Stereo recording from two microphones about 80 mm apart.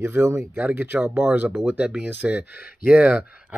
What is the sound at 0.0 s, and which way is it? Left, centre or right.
Speech, right.